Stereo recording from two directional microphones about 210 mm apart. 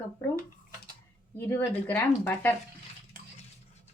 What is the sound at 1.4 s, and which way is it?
Speech, 10° left (ahead or behind).